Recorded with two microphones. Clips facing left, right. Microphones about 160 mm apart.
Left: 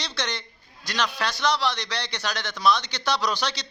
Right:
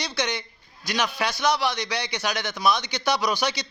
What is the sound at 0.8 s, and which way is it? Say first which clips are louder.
A man's voice: right 1 dB; 10° right (ahead or behind).